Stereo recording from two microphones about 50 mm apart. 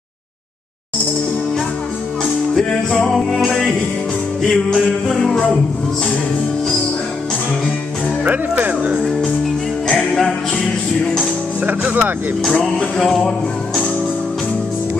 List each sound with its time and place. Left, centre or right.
3.1 s music: centre
4.7 s music: centre
8.2 s speech: right
9.8 s music: centre
11.6 s speech: right
12.7 s music: centre